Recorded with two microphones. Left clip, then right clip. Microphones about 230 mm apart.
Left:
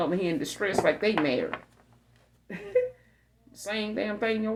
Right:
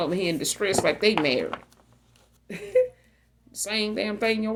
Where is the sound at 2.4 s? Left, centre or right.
Right.